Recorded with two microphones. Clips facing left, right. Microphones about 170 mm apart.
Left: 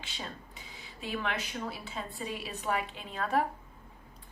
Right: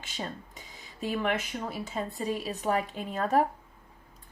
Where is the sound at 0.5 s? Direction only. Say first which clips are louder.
Even; 45° right (ahead or behind).